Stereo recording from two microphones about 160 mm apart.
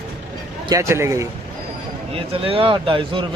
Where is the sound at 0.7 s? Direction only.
15° right (ahead or behind).